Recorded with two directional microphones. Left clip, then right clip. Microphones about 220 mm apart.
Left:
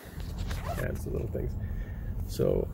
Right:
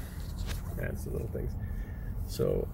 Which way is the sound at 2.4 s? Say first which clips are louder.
Left 3 dB; 15° left (ahead or behind).